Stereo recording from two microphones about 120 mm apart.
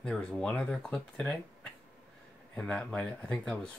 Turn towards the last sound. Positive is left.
turn(degrees=5)  # may be behind; listen again after turning